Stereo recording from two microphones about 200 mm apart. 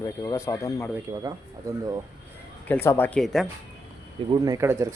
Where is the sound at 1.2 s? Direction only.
20° right (ahead or behind).